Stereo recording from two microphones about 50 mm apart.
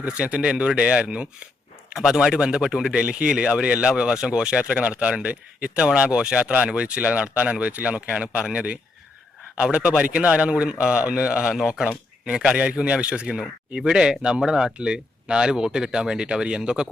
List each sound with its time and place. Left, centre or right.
0.0 s speech: right
0.5 s speech: centre
1.9 s speech: centre
2.9 s speech: centre